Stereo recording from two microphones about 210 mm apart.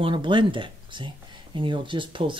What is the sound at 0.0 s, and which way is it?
Speech, 20° right (ahead or behind).